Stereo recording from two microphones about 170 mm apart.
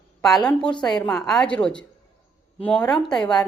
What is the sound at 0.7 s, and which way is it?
Speech, 25° left (ahead or behind).